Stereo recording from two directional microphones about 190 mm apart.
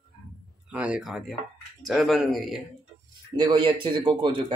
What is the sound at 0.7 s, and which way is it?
Speech, 5° right (ahead or behind).